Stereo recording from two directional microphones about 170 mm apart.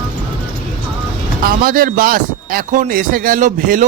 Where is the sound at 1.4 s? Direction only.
60° right (ahead or behind).